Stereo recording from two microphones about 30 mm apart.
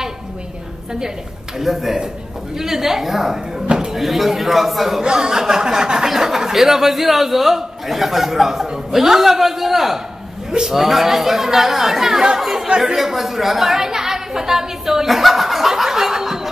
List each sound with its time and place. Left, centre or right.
1.6 s a man's voice: centre
5.0 s a sound: right
6.0 s a man's voice: centre
12.6 s a sound: right
12.9 s a man's voice: centre
13.7 s a woman's voice: centre
15.0 s snicker: centre